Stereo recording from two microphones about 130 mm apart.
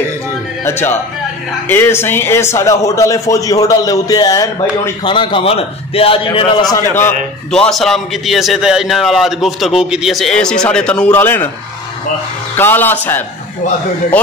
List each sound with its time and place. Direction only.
0.7 s a man's voice: 15° left (ahead or behind); by 6.6 s 45° left (ahead or behind)
7.5 s a man's voice: 5° left (ahead or behind)
12.5 s a man's voice: 15° left (ahead or behind)